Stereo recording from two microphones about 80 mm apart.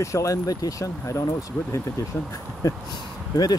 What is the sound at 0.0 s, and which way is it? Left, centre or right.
Speech, left.